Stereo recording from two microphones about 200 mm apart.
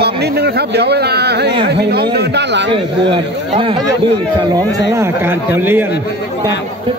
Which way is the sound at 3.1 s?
25° right (ahead or behind).